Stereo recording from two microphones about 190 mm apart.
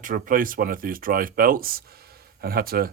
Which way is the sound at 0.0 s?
45° right (ahead or behind).